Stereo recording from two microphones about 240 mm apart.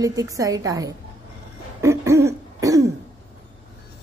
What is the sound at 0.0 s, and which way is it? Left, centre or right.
Speech, centre.